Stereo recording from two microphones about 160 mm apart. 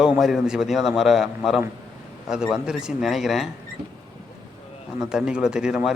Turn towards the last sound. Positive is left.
turn(degrees=-5)  # may be behind; listen again after turning